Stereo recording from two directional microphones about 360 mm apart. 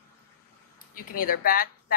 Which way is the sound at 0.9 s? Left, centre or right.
Left.